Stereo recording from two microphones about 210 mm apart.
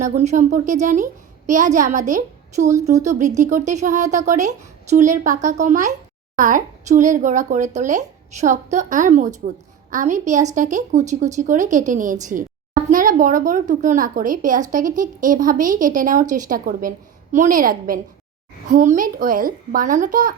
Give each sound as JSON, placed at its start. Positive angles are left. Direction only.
{"t": 0.0, "sound": "a woman's voice", "side_deg": -35}